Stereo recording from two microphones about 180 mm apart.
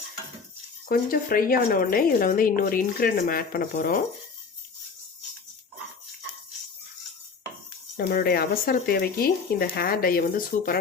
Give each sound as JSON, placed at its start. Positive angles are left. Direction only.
{"t": 0.9, "sound": "speech", "side_deg": 50}
{"t": 7.9, "sound": "speech", "side_deg": 60}